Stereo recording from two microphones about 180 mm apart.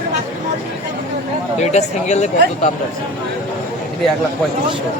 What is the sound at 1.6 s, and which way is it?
Speech, 40° left (ahead or behind).